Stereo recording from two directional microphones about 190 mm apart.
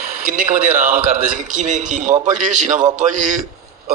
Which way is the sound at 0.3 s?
45° right (ahead or behind).